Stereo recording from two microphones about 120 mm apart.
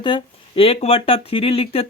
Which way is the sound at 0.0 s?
45° left (ahead or behind).